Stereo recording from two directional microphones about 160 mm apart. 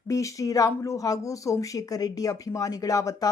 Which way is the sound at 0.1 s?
20° left (ahead or behind).